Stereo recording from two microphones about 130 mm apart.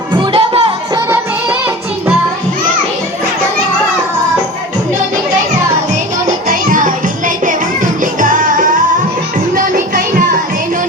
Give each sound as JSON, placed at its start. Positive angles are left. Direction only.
{"t": 0.1, "sound": "music", "side_deg": -45}
{"t": 0.9, "sound": "music", "side_deg": -15}
{"t": 5.9, "sound": "music", "side_deg": -80}